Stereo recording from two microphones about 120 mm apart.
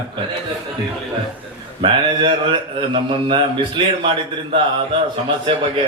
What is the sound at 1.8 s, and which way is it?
Speech, 45° right (ahead or behind).